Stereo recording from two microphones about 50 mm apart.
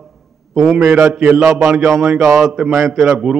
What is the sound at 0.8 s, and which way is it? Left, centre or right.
Speech, right.